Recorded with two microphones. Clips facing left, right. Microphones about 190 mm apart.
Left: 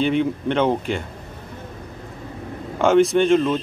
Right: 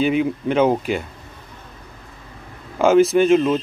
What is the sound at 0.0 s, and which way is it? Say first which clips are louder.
Speech: right 1 dB; 5° right (ahead or behind).